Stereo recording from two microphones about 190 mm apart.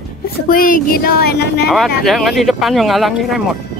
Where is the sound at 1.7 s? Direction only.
Centre (ahead or behind).